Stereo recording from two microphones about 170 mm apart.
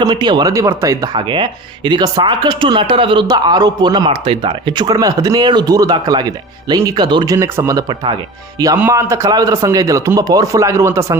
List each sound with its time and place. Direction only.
0.0 s speech: 25° right (ahead or behind)